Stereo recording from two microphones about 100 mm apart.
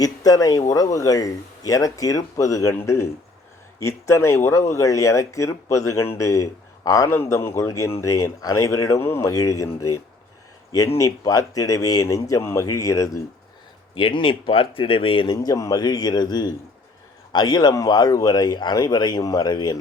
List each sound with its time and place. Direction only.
0.0 s a man's voice: 40° left (ahead or behind)
13.9 s speech: 65° left (ahead or behind)
15.3 s speech: 35° left (ahead or behind)